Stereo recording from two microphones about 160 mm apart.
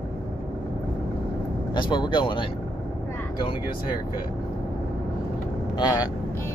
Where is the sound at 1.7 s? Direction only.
30° left (ahead or behind).